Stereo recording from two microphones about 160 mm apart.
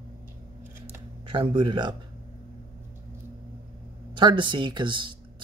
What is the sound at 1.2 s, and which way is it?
Speech, 35° right (ahead or behind).